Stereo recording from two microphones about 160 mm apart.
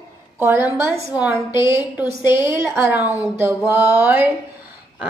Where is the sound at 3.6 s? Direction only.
15° right (ahead or behind).